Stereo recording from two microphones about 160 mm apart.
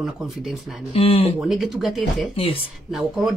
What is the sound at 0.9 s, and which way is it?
Speech, 35° left (ahead or behind).